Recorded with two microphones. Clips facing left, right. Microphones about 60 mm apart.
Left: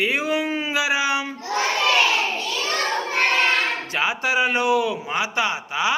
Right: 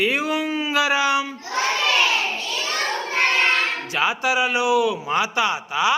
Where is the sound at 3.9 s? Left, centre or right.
Left.